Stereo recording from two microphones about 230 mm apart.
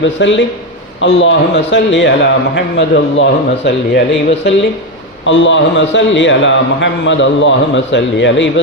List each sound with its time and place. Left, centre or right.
0.0 s a man's voice: left